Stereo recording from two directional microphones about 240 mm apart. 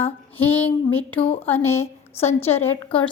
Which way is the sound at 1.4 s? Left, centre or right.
Centre.